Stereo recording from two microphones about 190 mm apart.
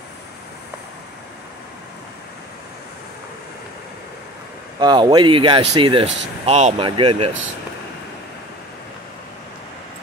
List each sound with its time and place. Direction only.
4.7 s speech: 25° right (ahead or behind)